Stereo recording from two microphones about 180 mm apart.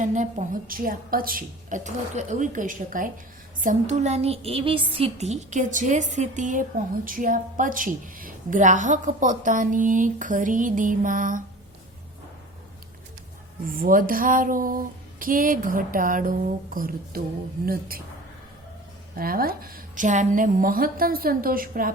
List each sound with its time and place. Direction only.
0.0 s a woman's voice: 40° right (ahead or behind)
3.6 s a sound: 45° right (ahead or behind)
4.9 s a woman's voice: 35° right (ahead or behind)
13.7 s a woman's voice: 50° right (ahead or behind)
19.1 s a woman's voice: 55° right (ahead or behind)